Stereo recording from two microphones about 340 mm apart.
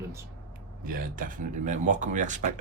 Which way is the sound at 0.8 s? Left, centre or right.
Right.